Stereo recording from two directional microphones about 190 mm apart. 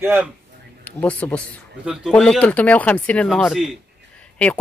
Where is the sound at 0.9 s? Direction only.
10° left (ahead or behind).